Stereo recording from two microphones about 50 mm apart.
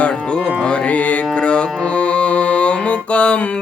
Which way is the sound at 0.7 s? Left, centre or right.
Left.